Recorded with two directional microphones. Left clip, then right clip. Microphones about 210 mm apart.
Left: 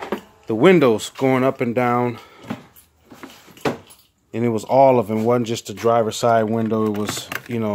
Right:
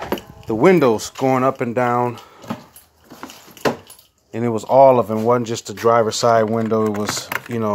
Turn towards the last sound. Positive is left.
turn(degrees=5)  # may be behind; listen again after turning